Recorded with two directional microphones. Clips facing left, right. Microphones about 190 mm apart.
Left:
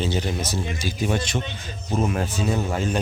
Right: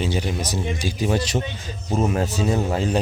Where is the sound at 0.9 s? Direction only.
35° right (ahead or behind).